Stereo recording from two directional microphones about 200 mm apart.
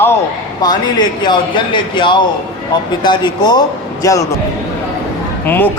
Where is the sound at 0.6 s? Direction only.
20° left (ahead or behind).